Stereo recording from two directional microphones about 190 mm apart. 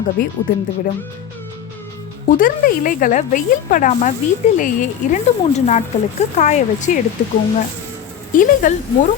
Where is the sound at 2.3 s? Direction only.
45° left (ahead or behind).